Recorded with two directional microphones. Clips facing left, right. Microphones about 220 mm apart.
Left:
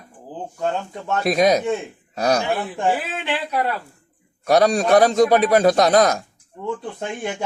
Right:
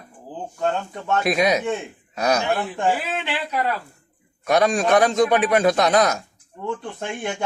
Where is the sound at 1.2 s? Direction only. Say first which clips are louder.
Left 4 dB; 35° left (ahead or behind).